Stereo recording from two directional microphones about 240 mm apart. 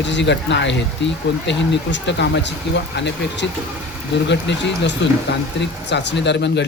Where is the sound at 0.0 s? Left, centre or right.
Left.